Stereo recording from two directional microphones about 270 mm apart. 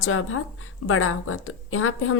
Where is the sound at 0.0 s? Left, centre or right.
Left.